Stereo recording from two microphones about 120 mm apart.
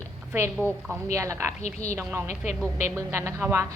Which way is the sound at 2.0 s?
15° right (ahead or behind).